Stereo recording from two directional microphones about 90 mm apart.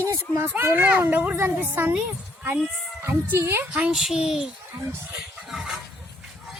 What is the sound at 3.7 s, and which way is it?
Speech, 10° right (ahead or behind).